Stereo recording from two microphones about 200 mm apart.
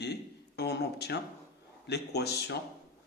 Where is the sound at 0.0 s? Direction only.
55° left (ahead or behind).